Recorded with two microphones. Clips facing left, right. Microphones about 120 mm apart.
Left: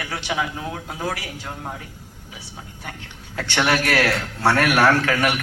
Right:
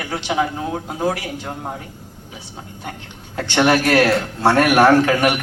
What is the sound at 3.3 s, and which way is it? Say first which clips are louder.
A man's voice: right 5 dB; 20° right (ahead or behind).